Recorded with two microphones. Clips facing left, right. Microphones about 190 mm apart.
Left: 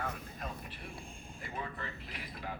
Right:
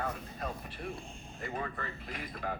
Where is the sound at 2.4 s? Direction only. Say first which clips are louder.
Right 5 dB; 50° right (ahead or behind).